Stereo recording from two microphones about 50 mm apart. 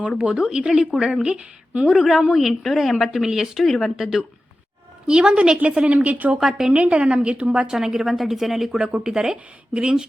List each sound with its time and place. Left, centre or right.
0.2 s a woman's voice: centre
3.6 s a woman's voice: centre
3.9 s a woman's voice: centre
5.0 s a woman's voice: centre
6.4 s a woman's voice: centre
6.7 s a woman's voice: right
7.8 s a woman's voice: centre
8.8 s a woman's voice: centre